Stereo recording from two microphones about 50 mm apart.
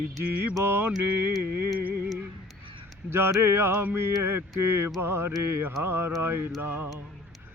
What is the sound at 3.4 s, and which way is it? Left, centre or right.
Speech, right.